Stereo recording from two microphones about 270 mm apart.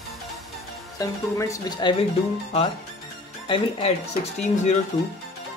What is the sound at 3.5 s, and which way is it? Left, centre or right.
Speech, left.